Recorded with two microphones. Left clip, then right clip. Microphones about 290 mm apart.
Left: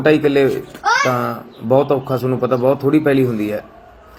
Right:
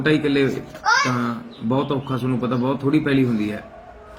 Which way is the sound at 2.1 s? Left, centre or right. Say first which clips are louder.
Left 7 dB; centre.